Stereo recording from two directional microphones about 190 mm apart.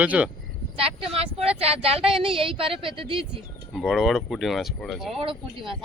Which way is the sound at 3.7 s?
Centre (ahead or behind).